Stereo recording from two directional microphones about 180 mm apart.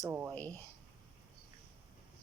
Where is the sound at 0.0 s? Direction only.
15° right (ahead or behind).